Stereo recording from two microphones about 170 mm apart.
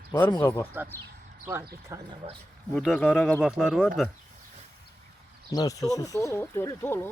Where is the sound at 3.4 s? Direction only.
5° right (ahead or behind).